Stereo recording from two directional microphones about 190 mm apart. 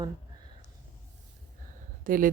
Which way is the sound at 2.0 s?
45° right (ahead or behind).